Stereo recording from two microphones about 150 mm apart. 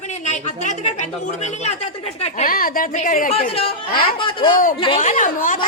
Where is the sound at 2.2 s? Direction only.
65° left (ahead or behind).